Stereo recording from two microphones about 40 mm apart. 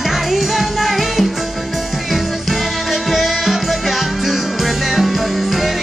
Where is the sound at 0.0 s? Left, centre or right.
Centre.